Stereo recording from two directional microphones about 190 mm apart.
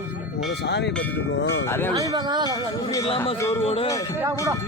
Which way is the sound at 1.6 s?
10° left (ahead or behind).